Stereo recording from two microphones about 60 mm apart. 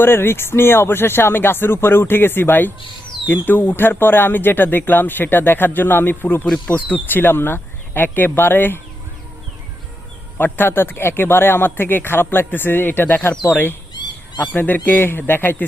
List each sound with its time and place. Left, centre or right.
0.0 s speech: left
10.3 s speech: left